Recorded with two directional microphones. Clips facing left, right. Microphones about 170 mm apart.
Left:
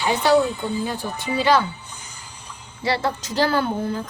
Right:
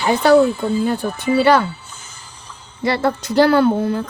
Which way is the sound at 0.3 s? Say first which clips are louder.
Right 6 dB; 20° left (ahead or behind).